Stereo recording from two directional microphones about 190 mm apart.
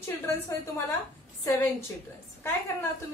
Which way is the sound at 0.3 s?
15° left (ahead or behind).